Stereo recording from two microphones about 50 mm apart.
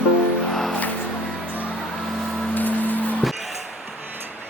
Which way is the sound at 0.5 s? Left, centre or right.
Centre.